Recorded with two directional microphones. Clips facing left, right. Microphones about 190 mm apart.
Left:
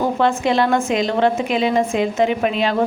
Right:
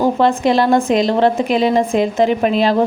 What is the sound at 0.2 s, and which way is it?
A woman's voice, 35° right (ahead or behind).